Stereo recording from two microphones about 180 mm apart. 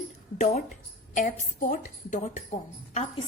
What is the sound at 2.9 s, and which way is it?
Speech, 35° left (ahead or behind).